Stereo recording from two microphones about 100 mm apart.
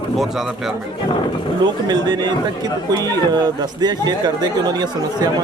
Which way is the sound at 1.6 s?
45° right (ahead or behind).